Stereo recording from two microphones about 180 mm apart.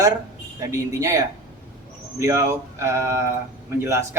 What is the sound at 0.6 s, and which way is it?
A man's voice, 20° right (ahead or behind).